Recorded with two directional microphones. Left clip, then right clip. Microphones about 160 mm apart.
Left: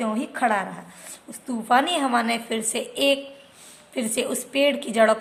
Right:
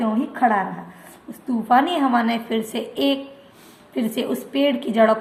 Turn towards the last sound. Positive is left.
turn(degrees=25)  # may be behind; listen again after turning